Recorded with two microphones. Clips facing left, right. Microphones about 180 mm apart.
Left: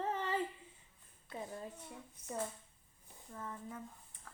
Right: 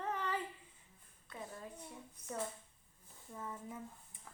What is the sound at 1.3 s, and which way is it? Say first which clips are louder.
Speech: left 4 dB; 25° left (ahead or behind).